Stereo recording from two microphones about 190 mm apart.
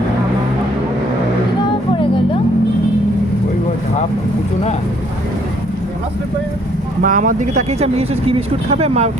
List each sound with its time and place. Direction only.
7.0 s speech: 45° right (ahead or behind)